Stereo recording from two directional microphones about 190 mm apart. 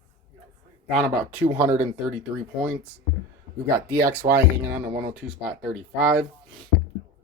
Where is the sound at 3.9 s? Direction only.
10° right (ahead or behind).